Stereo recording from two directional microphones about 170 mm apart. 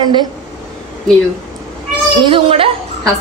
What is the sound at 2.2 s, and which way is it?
Speech, 30° right (ahead or behind).